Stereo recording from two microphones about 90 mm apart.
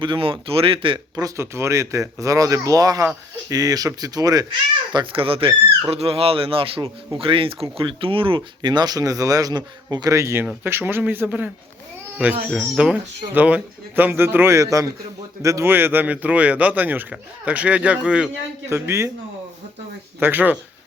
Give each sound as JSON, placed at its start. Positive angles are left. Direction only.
{"t": 0.0, "sound": "speech", "side_deg": -70}
{"t": 1.4, "sound": "speech", "side_deg": -30}
{"t": 5.1, "sound": "speech", "side_deg": -90}
{"t": 12.5, "sound": "speech", "side_deg": 0}
{"t": 12.7, "sound": "speech", "side_deg": -10}
{"t": 18.7, "sound": "speech", "side_deg": -30}
{"t": 20.1, "sound": "speech", "side_deg": -20}